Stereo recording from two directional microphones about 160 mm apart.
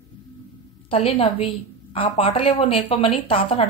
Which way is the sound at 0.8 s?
40° left (ahead or behind).